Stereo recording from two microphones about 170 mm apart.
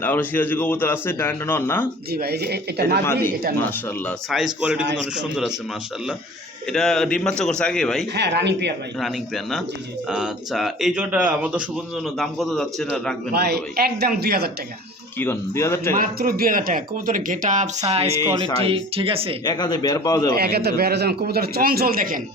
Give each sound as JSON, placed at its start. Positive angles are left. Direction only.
{"t": 0.0, "sound": "a man's voice", "side_deg": 10}
{"t": 2.1, "sound": "a man's voice", "side_deg": -65}
{"t": 3.0, "sound": "a man's voice", "side_deg": 15}
{"t": 4.6, "sound": "a man's voice", "side_deg": -10}
{"t": 6.7, "sound": "speech", "side_deg": 5}
{"t": 8.1, "sound": "speech", "side_deg": -90}
{"t": 9.0, "sound": "speech", "side_deg": 0}
{"t": 13.3, "sound": "a man's voice", "side_deg": -70}
{"t": 15.2, "sound": "a man's voice", "side_deg": 15}
{"t": 15.9, "sound": "speech", "side_deg": -55}
{"t": 17.8, "sound": "speech", "side_deg": -35}
{"t": 19.5, "sound": "a man's voice", "side_deg": 25}
{"t": 20.3, "sound": "a man's voice", "side_deg": -65}